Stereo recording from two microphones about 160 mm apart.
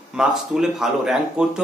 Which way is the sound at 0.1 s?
5° right (ahead or behind).